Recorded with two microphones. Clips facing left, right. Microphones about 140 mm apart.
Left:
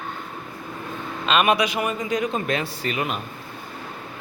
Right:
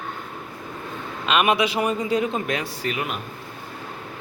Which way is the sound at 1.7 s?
30° right (ahead or behind).